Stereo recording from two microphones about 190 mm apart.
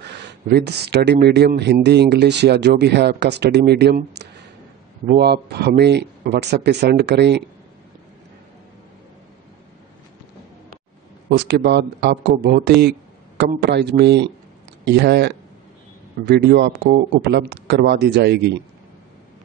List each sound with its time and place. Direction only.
0.0 s speech: 65° right (ahead or behind)
11.2 s speech: 60° right (ahead or behind)